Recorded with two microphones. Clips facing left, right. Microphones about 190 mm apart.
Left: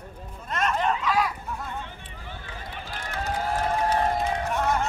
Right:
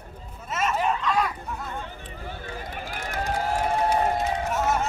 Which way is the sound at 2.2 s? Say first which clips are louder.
Right 4 dB; 40° right (ahead or behind).